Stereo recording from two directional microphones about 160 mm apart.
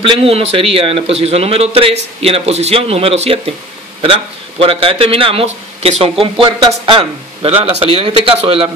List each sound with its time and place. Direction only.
0.0 s a man's voice: 35° right (ahead or behind)